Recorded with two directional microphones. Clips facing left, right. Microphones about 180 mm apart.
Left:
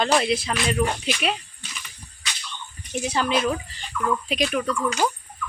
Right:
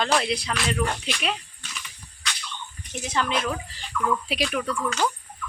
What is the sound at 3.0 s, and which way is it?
Speech, 10° left (ahead or behind).